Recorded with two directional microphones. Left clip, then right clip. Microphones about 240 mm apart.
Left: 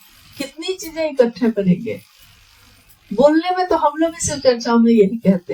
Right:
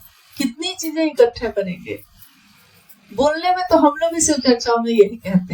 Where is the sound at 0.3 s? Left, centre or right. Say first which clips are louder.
Right 1 dB; right.